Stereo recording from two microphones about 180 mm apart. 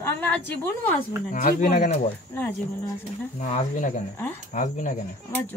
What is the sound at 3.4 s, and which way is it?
Speech, 45° left (ahead or behind).